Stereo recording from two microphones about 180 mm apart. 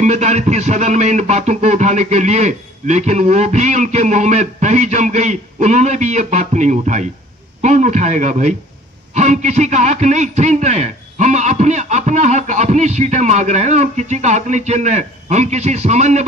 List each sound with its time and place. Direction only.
0.0 s a man's voice: 40° right (ahead or behind)